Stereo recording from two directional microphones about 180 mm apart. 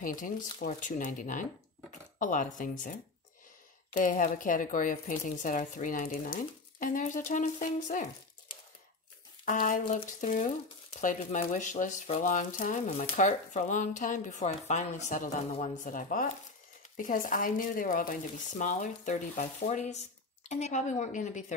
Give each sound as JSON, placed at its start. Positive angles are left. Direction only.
{"t": 0.0, "sound": "speech", "side_deg": 50}
{"t": 9.4, "sound": "speech", "side_deg": 45}